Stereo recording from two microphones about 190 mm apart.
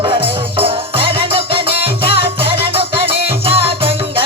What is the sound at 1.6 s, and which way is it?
Music, 55° left (ahead or behind).